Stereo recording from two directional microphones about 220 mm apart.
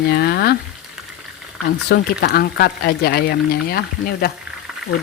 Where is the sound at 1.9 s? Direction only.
45° left (ahead or behind).